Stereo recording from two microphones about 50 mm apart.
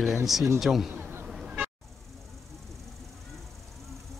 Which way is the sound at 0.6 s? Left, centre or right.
Centre.